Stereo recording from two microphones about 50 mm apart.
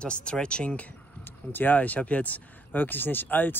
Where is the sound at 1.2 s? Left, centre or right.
Left.